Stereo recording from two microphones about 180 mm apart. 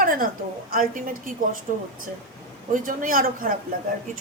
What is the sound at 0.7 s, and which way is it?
A woman's voice, 50° right (ahead or behind).